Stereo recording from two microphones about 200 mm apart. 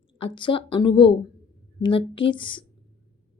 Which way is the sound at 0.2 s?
25° left (ahead or behind).